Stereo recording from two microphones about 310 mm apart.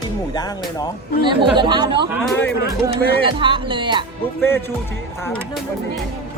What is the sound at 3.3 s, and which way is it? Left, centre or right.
Speech, centre.